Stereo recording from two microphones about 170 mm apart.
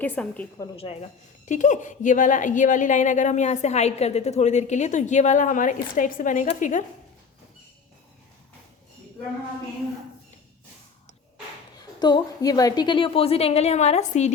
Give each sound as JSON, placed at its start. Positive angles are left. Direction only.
{"t": 0.0, "sound": "a woman's voice", "side_deg": 10}
{"t": 1.5, "sound": "a woman's voice", "side_deg": 45}
{"t": 11.8, "sound": "a woman's voice", "side_deg": 25}